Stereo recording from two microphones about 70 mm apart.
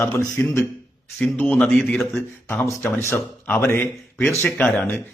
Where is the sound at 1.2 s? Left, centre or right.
Centre.